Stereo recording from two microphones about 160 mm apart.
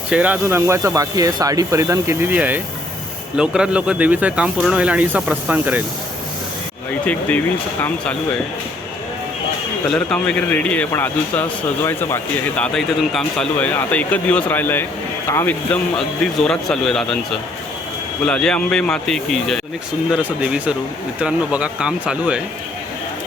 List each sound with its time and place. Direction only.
0.1 s speech: 10° right (ahead or behind)
7.0 s a man's voice: 10° left (ahead or behind)
9.9 s a man's voice: 5° left (ahead or behind)
18.3 s speech: 5° left (ahead or behind)